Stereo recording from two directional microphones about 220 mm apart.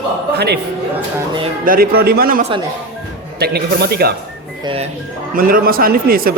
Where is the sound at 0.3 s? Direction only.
50° right (ahead or behind).